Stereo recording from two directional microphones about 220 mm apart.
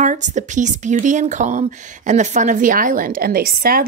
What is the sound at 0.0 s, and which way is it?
Speech, 35° right (ahead or behind).